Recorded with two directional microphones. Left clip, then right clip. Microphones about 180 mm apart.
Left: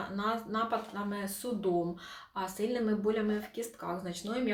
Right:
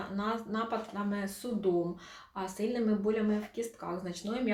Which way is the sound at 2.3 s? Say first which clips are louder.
Left 1 dB; 15° left (ahead or behind).